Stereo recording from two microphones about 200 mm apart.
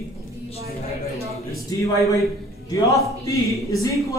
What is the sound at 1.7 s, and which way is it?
Speech, 15° left (ahead or behind).